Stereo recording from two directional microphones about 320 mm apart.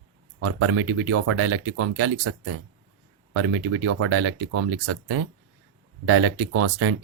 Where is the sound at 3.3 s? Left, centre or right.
Right.